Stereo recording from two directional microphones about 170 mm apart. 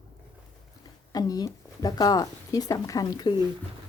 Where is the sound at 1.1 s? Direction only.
20° left (ahead or behind).